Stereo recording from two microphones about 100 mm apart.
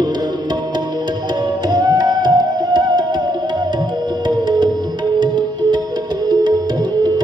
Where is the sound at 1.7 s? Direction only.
40° right (ahead or behind).